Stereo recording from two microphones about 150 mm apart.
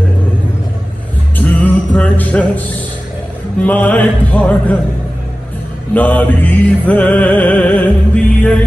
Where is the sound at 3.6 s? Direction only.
10° left (ahead or behind).